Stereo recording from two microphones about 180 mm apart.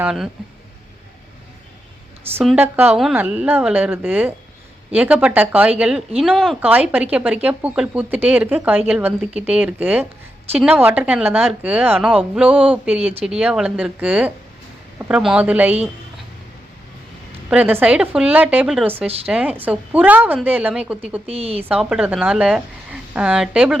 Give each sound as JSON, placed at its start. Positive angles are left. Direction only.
{"t": 0.0, "sound": "a woman's voice", "side_deg": -5}
{"t": 2.3, "sound": "a woman's voice", "side_deg": -5}
{"t": 17.5, "sound": "a woman's voice", "side_deg": -10}
{"t": 21.2, "sound": "speech", "side_deg": -35}
{"t": 21.6, "sound": "a woman's voice", "side_deg": -5}